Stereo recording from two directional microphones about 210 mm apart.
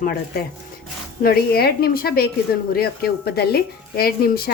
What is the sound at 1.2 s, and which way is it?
A woman's voice, 45° left (ahead or behind).